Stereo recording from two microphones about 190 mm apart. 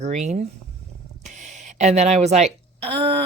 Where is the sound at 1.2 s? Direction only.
40° right (ahead or behind).